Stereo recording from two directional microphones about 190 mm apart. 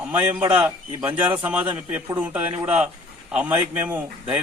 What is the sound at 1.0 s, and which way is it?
A man's voice, 5° right (ahead or behind).